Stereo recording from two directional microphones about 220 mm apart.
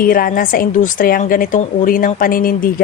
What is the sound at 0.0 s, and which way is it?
A woman's voice, 40° left (ahead or behind).